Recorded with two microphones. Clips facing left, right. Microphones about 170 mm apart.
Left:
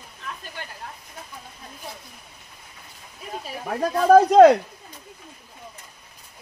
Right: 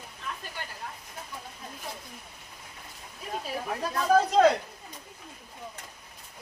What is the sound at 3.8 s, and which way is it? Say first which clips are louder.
Speech: left 9 dB; 60° left (ahead or behind).